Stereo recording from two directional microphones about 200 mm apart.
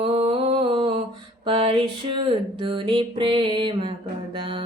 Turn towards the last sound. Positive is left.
turn(degrees=-25)  # may be behind; listen again after turning